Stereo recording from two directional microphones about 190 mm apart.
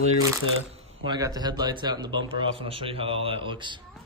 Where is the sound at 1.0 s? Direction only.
20° right (ahead or behind).